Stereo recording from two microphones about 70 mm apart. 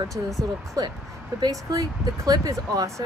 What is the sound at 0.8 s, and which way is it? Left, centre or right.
Speech, right.